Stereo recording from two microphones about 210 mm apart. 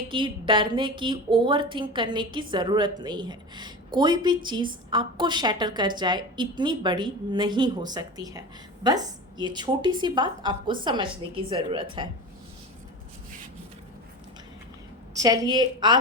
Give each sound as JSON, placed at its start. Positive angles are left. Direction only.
{"t": 0.1, "sound": "a woman's voice", "side_deg": -25}
{"t": 15.1, "sound": "a woman's voice", "side_deg": -15}